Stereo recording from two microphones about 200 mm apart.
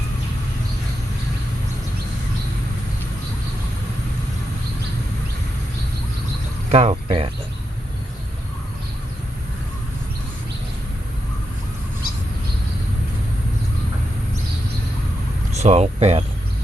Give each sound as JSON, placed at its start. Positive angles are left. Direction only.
{"t": 6.7, "sound": "speech", "side_deg": -30}
{"t": 15.5, "sound": "speech", "side_deg": -35}